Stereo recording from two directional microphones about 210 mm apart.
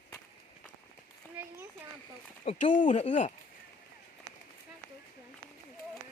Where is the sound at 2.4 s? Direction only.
35° left (ahead or behind).